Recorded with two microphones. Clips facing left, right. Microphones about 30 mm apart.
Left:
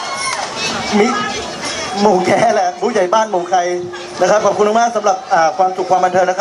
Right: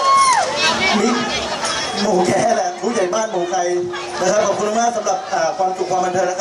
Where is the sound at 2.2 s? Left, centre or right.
Left.